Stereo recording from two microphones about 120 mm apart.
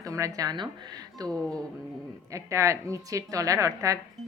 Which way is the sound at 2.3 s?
25° right (ahead or behind).